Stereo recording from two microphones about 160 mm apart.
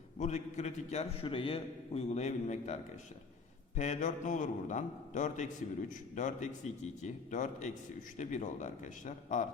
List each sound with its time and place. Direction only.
0.2 s a man's voice: 45° left (ahead or behind)
3.8 s a man's voice: 50° left (ahead or behind)